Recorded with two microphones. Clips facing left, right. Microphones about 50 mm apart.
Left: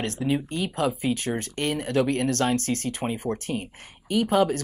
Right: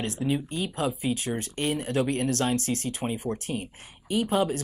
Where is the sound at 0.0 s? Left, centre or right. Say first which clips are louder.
Left 2 dB; left.